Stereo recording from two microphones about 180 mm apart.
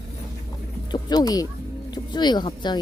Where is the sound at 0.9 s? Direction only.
20° left (ahead or behind).